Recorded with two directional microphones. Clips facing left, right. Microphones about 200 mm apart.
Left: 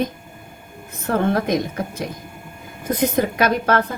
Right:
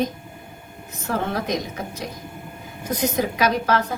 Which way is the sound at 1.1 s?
55° left (ahead or behind).